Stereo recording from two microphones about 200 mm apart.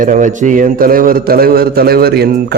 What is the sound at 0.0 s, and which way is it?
A man's voice, 40° right (ahead or behind).